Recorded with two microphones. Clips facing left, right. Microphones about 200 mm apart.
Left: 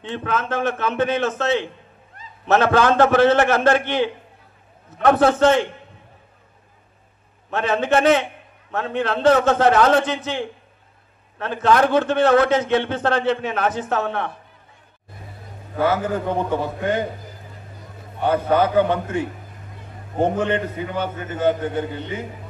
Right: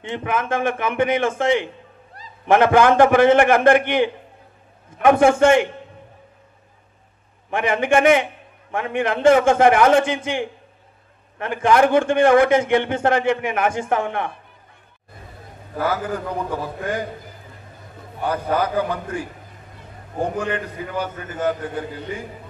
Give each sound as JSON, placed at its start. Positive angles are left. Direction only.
{"t": 0.1, "sound": "a man's voice", "side_deg": -15}
{"t": 7.5, "sound": "a man's voice", "side_deg": -15}
{"t": 15.9, "sound": "a man's voice", "side_deg": 25}
{"t": 18.2, "sound": "a man's voice", "side_deg": 25}